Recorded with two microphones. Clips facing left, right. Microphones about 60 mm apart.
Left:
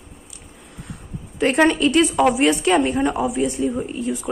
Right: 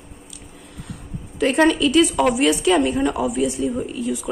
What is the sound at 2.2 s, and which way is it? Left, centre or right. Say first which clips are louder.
Speech: left 2 dB; centre.